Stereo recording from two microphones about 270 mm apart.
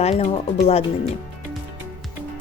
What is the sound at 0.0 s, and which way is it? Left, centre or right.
Speech, left.